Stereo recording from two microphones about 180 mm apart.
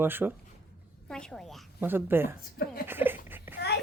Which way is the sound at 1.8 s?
10° right (ahead or behind).